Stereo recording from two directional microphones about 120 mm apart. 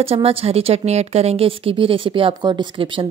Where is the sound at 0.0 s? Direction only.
55° right (ahead or behind).